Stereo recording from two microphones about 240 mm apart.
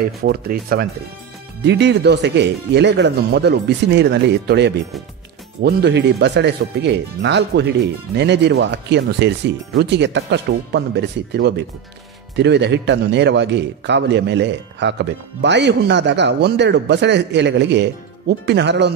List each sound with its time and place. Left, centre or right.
0.2 s speech: right